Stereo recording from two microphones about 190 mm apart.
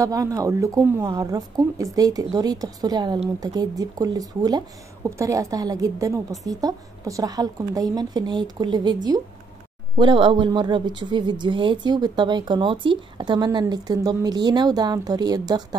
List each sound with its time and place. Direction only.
0.0 s a woman's voice: 15° right (ahead or behind)